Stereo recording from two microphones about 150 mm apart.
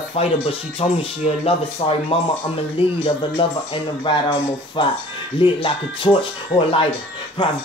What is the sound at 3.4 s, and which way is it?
Speech, 35° left (ahead or behind).